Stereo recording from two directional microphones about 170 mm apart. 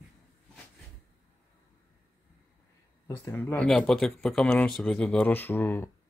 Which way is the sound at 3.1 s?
15° left (ahead or behind).